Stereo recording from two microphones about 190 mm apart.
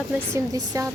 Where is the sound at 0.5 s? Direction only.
20° right (ahead or behind).